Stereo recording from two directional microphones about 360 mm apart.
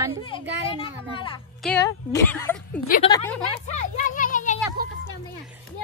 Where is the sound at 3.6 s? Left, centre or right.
Centre.